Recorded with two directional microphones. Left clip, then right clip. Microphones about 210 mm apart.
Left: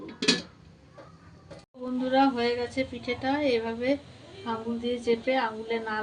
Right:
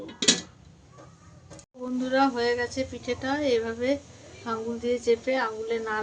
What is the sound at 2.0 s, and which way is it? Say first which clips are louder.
A woman's voice: even; 15° right (ahead or behind).